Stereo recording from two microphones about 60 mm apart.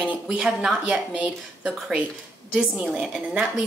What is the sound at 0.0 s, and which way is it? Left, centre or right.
Speech, right.